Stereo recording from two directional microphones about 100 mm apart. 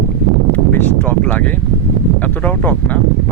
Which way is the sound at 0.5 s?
20° left (ahead or behind).